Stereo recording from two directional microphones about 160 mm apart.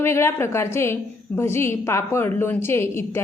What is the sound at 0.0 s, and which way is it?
A woman's voice, 15° left (ahead or behind).